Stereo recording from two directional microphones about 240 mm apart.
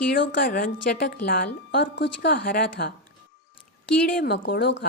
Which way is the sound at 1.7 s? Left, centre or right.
Left.